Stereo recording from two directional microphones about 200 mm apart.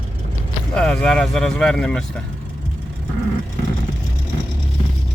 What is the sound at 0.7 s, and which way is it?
Speech, 5° left (ahead or behind).